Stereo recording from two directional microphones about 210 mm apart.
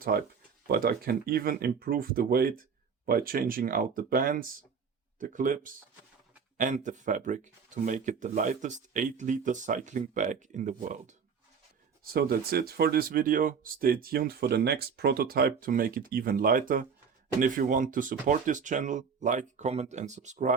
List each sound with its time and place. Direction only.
0.0 s speech: 45° right (ahead or behind)
12.1 s speech: 45° right (ahead or behind)